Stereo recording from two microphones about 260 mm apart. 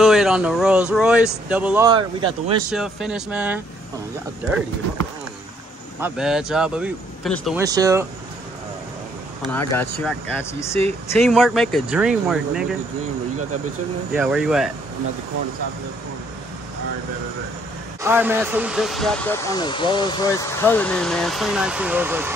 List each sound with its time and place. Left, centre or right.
0.0 s speech: centre
1.9 s speech: centre
2.7 s speech: centre
5.9 s speech: centre
7.6 s speech: centre
9.5 s speech: centre
14.1 s speech: centre
18.0 s speech: centre